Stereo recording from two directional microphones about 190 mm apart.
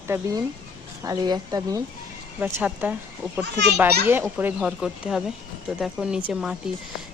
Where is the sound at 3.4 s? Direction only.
65° right (ahead or behind).